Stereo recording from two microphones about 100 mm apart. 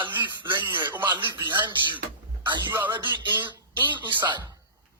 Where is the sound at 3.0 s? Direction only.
55° right (ahead or behind).